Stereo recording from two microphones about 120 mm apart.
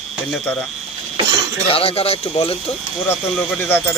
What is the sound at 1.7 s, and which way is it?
Speech, 50° left (ahead or behind).